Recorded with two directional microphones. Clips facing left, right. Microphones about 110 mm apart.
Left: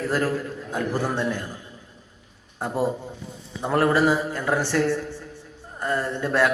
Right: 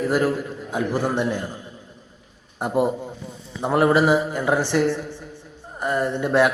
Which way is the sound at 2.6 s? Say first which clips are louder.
Right 4 dB; 15° right (ahead or behind).